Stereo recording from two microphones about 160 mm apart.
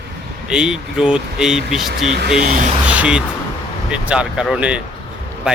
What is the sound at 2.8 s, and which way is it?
Speech, 10° right (ahead or behind).